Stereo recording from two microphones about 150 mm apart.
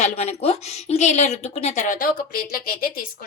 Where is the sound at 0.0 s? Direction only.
45° left (ahead or behind).